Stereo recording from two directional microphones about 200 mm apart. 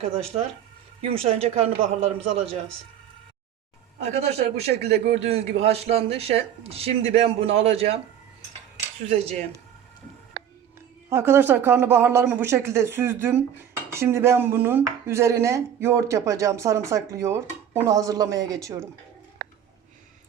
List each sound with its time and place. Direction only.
1.0 s a man's voice: 30° right (ahead or behind)
4.0 s a man's voice: 35° right (ahead or behind)
9.0 s a man's voice: 30° right (ahead or behind)
11.1 s speech: 10° right (ahead or behind)